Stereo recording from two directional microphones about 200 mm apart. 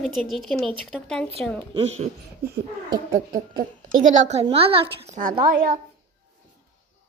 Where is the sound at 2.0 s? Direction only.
35° right (ahead or behind).